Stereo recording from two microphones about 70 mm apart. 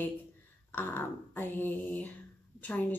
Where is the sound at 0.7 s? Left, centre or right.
Left.